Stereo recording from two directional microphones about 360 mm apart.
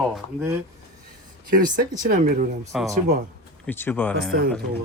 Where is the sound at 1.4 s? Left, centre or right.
Right.